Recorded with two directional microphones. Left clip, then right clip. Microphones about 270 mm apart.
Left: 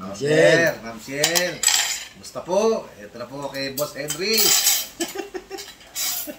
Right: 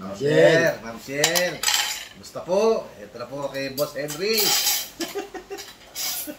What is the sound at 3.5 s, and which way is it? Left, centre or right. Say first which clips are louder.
Cutlery: left 1 dB; centre.